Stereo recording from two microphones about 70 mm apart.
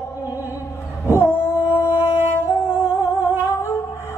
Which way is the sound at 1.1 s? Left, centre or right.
Left.